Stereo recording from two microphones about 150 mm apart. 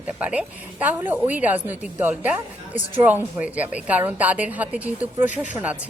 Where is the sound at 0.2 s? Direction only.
10° right (ahead or behind).